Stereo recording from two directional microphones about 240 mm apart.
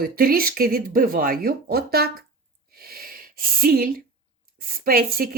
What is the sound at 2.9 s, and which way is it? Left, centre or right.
Wheeze, right.